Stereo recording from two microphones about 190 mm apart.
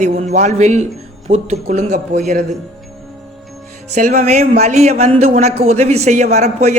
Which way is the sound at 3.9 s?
40° right (ahead or behind).